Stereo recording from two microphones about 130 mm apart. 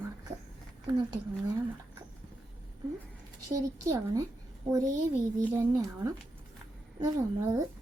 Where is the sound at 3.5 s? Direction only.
25° right (ahead or behind).